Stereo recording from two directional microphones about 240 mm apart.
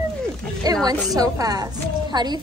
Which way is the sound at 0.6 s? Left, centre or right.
Centre.